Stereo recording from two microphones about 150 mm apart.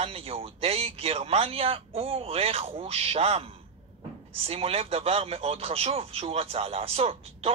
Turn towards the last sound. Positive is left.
turn(degrees=-40)  # may be behind; listen again after turning